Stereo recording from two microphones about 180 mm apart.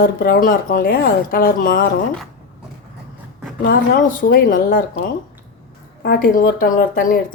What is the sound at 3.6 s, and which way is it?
A woman's voice, 55° left (ahead or behind).